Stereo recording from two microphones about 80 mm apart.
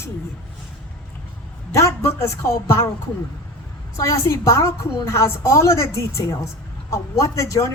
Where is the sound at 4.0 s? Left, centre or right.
Left.